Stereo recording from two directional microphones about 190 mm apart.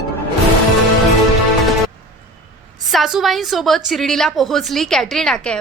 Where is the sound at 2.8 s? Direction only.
Centre (ahead or behind).